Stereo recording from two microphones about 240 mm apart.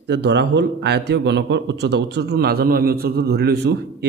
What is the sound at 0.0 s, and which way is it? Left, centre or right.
A man's voice, right.